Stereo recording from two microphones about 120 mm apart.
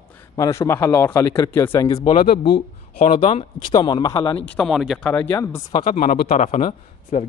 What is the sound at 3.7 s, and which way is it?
Speech, 35° left (ahead or behind).